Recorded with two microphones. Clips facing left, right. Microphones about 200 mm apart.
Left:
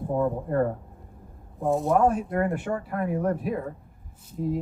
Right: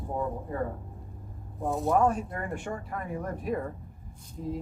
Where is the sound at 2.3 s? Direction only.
60° left (ahead or behind).